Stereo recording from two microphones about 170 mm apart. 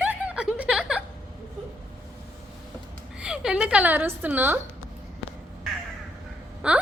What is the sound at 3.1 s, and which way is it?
A woman's voice, 5° right (ahead or behind).